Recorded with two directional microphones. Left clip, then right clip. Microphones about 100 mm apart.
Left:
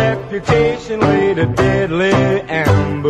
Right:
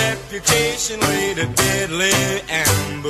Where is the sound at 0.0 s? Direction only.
20° right (ahead or behind).